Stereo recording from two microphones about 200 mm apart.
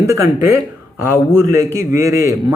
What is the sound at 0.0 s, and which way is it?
A man's voice, 15° right (ahead or behind).